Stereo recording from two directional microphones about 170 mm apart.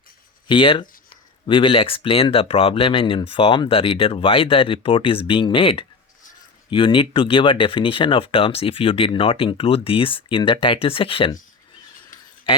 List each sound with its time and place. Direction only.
0.4 s speech: 30° left (ahead or behind)